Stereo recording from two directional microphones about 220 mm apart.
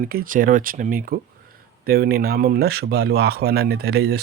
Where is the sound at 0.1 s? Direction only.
40° right (ahead or behind).